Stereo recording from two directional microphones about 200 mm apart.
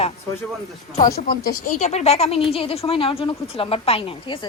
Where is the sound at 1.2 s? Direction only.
45° left (ahead or behind); by 4.5 s 25° left (ahead or behind).